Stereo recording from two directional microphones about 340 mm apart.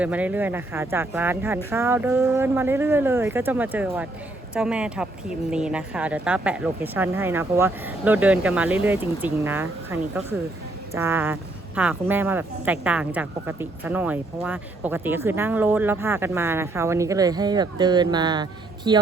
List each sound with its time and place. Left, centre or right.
0.0 s a woman's voice: centre